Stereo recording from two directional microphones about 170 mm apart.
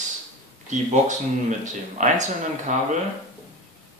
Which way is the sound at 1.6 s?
45° right (ahead or behind).